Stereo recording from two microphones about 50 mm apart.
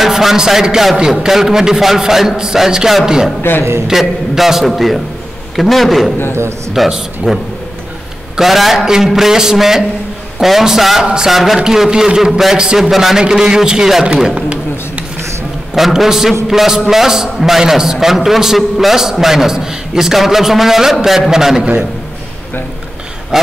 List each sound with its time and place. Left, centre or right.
0.0 s a man's voice: centre
3.4 s speech: left
3.8 s a man's voice: centre
8.4 s a man's voice: centre
14.2 s a sound: right
15.7 s a man's voice: centre
23.3 s a man's voice: centre